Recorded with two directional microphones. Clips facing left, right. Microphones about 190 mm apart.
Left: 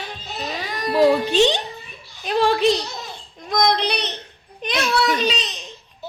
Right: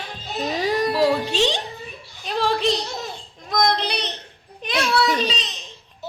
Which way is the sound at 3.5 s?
Centre (ahead or behind).